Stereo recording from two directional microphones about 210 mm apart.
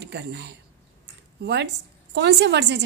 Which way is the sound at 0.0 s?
55° right (ahead or behind).